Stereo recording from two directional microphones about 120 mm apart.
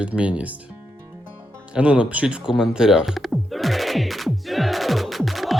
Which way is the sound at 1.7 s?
10° right (ahead or behind).